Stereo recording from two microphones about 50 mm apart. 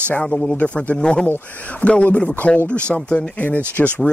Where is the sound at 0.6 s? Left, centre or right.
Left.